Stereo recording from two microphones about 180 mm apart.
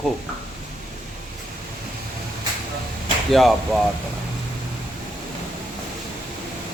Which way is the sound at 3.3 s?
Centre (ahead or behind).